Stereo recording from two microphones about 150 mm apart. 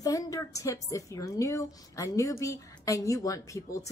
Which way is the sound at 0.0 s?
20° left (ahead or behind).